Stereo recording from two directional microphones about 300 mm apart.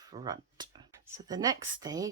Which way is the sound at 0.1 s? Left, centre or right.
Centre.